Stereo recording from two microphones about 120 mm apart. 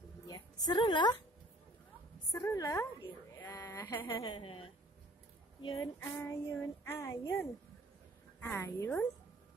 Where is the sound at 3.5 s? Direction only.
15° left (ahead or behind).